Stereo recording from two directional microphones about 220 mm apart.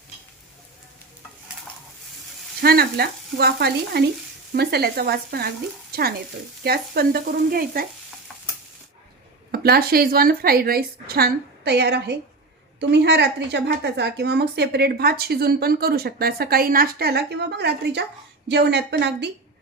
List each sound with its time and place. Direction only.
2.6 s a woman's voice: 45° right (ahead or behind)
9.5 s a woman's voice: 45° right (ahead or behind)